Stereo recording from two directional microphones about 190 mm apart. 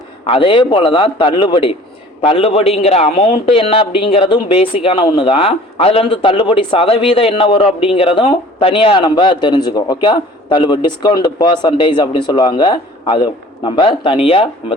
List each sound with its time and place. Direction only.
0.3 s a man's voice: 25° left (ahead or behind)